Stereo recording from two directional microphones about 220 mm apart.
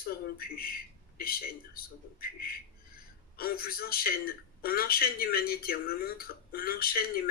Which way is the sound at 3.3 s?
40° left (ahead or behind).